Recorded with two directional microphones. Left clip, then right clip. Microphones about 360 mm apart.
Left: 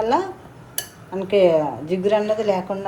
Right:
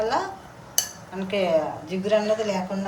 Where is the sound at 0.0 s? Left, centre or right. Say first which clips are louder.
Left 4 dB; centre.